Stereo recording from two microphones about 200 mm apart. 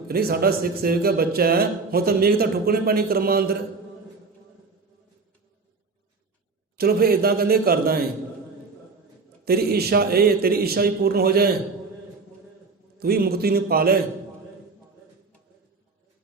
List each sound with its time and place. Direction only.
0.1 s speech: 50° right (ahead or behind)
6.7 s speech: 50° right (ahead or behind)
9.4 s speech: 50° right (ahead or behind)
13.0 s speech: 50° right (ahead or behind)